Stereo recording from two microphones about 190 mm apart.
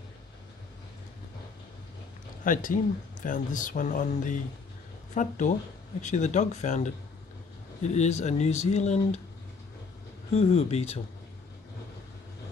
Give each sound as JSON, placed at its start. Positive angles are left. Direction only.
{"t": 2.4, "sound": "speech", "side_deg": 45}
{"t": 10.3, "sound": "speech", "side_deg": 35}